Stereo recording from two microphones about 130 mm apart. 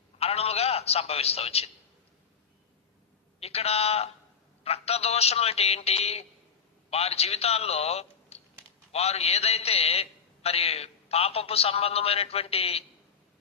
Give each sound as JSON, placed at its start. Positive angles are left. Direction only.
{"t": 0.2, "sound": "a man's voice", "side_deg": 50}
{"t": 3.4, "sound": "a man's voice", "side_deg": 50}